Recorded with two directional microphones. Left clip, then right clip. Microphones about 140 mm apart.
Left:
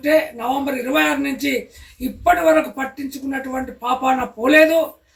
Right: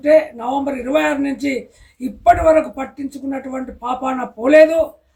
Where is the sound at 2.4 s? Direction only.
30° right (ahead or behind).